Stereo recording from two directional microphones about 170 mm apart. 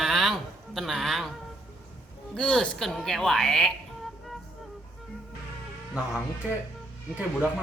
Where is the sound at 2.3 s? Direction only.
5° left (ahead or behind).